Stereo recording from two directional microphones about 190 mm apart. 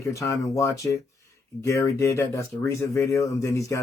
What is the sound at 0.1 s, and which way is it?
Speech, 15° left (ahead or behind).